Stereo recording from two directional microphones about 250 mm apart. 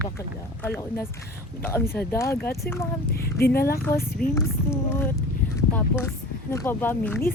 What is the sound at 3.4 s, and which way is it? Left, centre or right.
Speech, left.